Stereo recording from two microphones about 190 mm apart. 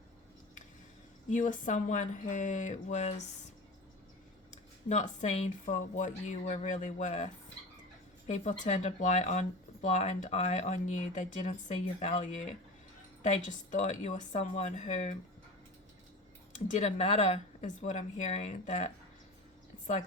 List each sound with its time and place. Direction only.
1.3 s speech: 40° left (ahead or behind)
4.5 s speech: 40° left (ahead or behind)
8.3 s speech: 40° left (ahead or behind)
16.5 s speech: 35° left (ahead or behind)